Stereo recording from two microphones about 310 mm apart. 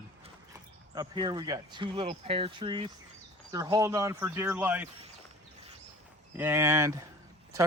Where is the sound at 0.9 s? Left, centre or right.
Centre.